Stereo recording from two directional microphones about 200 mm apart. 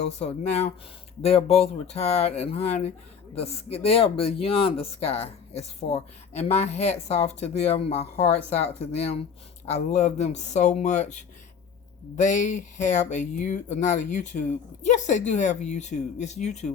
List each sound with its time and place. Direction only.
0.2 s speech: 30° left (ahead or behind)